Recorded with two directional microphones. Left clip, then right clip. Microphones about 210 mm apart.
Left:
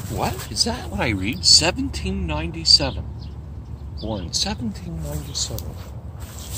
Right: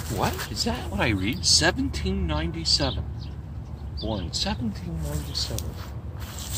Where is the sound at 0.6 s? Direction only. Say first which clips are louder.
Left 6 dB; 15° left (ahead or behind).